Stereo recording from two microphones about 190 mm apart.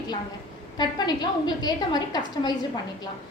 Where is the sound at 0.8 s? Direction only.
20° left (ahead or behind).